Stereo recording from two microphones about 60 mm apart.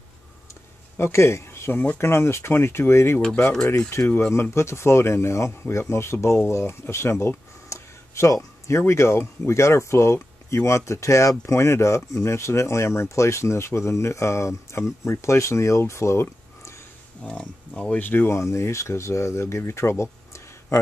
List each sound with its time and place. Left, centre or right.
0.9 s speech: left
6.5 s a sound: left
8.6 s speech: left
17.2 s speech: centre
17.9 s speech: left
18.3 s speech: left